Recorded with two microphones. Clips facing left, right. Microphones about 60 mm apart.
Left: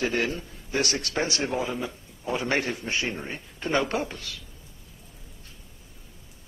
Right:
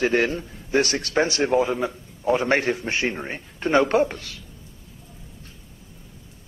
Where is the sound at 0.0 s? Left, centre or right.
Right.